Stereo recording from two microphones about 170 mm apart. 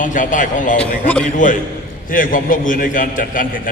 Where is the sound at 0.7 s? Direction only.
5° left (ahead or behind).